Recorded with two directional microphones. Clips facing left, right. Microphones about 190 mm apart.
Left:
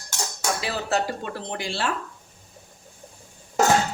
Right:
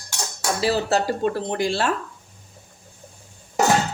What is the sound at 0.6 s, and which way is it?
A woman's voice, 35° right (ahead or behind).